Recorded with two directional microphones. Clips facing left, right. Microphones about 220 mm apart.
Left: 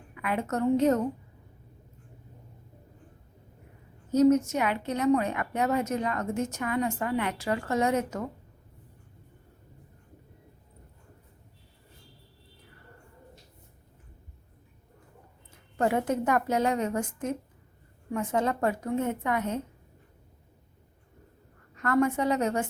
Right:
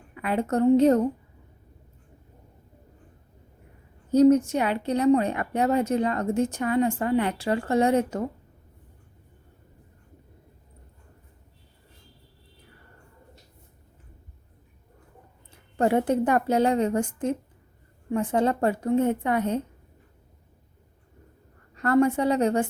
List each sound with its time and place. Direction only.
0.1 s a woman's voice: 30° right (ahead or behind)
4.1 s a woman's voice: 30° right (ahead or behind)
15.8 s a woman's voice: 30° right (ahead or behind)
21.8 s a woman's voice: 35° right (ahead or behind)